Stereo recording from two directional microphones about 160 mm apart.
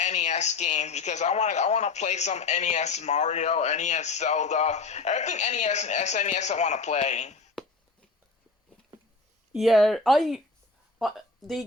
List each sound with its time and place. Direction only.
0.0 s speech: 45° left (ahead or behind)
9.5 s speech: centre (ahead or behind)